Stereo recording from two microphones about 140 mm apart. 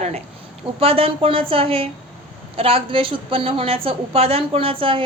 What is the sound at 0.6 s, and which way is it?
A woman's voice, 45° right (ahead or behind).